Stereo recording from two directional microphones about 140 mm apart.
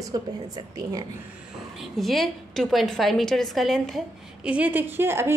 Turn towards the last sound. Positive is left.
turn(degrees=-15)  # may be behind; listen again after turning